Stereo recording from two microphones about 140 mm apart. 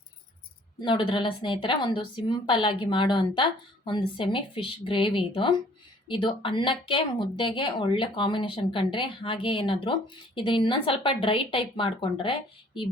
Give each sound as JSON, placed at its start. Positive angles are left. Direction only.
{"t": 0.8, "sound": "speech", "side_deg": 35}